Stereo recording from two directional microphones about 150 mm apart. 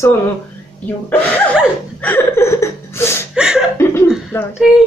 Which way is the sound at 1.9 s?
10° left (ahead or behind).